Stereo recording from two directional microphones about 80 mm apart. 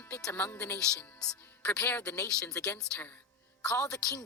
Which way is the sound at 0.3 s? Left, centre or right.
Left.